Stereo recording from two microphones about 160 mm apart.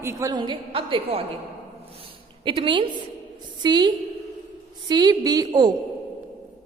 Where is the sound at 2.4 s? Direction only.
30° right (ahead or behind).